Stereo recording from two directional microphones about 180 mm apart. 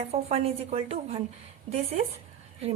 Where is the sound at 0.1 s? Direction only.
35° right (ahead or behind).